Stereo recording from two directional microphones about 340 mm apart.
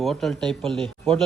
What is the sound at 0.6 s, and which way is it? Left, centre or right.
Speech, centre.